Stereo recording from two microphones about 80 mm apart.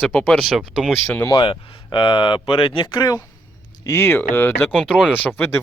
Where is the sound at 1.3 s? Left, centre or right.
Left.